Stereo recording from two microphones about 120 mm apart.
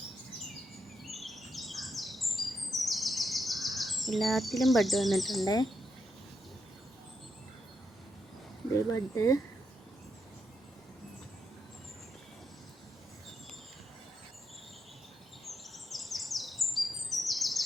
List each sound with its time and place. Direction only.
1.0 s bird: centre (ahead or behind)
9.1 s speech: 25° left (ahead or behind)
15.4 s bird vocalization: centre (ahead or behind)